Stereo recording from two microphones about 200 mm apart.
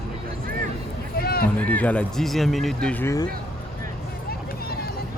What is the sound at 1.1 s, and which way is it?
Run, 50° left (ahead or behind).